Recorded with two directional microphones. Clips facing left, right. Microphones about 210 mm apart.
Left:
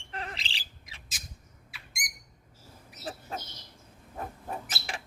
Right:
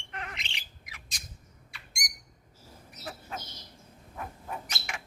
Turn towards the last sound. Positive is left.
turn(degrees=35)  # may be behind; listen again after turning